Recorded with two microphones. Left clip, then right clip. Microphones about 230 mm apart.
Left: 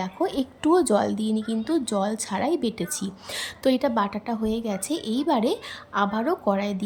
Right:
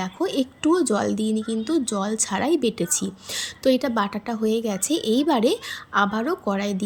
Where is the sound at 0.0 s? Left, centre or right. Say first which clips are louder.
Right 2 dB; centre.